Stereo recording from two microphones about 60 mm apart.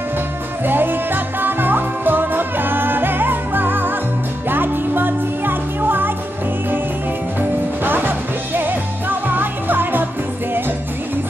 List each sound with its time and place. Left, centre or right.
0.7 s music: right
7.3 s music: right